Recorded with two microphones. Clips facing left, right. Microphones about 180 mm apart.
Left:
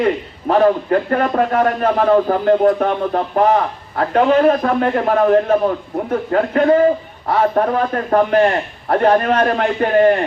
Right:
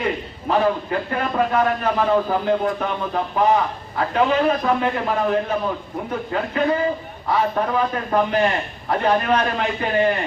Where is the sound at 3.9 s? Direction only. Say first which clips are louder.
Left 6 dB; 50° left (ahead or behind).